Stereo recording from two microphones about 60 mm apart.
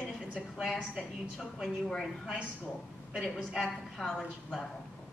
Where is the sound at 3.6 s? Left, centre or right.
Centre.